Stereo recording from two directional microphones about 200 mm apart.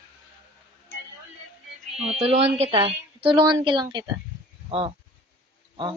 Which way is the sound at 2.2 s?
30° right (ahead or behind).